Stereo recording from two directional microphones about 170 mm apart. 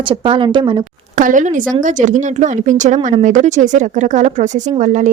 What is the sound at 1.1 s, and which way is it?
A woman's voice, 50° right (ahead or behind).